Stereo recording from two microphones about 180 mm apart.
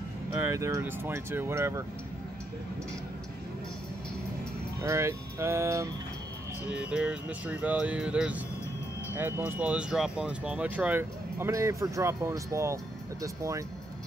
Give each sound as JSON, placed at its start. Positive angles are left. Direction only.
{"t": 0.4, "sound": "speech", "side_deg": -15}
{"t": 4.8, "sound": "speech", "side_deg": -15}